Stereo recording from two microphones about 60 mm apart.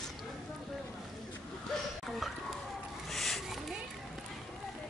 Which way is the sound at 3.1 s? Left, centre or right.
Centre.